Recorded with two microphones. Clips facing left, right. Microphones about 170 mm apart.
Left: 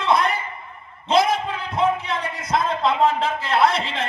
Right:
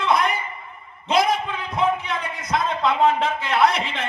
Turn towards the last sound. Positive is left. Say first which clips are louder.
# left 1 dB
turn(degrees=30)  # may be behind; listen again after turning